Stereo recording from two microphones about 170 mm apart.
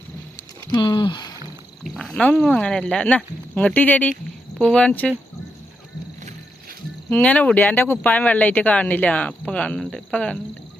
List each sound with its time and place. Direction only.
0.7 s speech: 25° left (ahead or behind)
1.8 s speech: centre (ahead or behind)
7.1 s speech: 10° left (ahead or behind)